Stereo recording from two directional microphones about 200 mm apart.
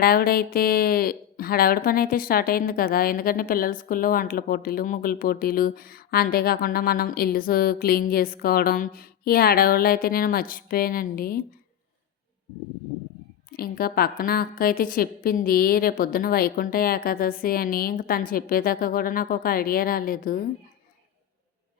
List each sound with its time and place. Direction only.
0.0 s speech: 50° left (ahead or behind)
13.5 s speech: 50° left (ahead or behind)